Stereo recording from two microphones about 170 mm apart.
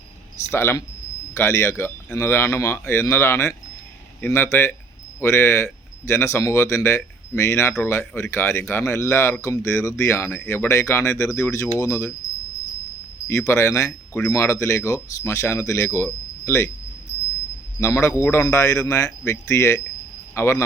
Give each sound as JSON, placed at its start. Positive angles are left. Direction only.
{"t": 0.5, "sound": "speech", "side_deg": 15}
{"t": 13.2, "sound": "speech", "side_deg": 15}
{"t": 17.7, "sound": "speech", "side_deg": 15}